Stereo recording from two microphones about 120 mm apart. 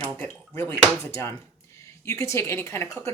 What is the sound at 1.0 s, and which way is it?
A woman's voice, 20° left (ahead or behind).